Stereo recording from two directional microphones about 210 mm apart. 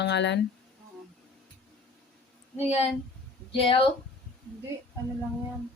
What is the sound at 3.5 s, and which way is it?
Speech, 25° left (ahead or behind).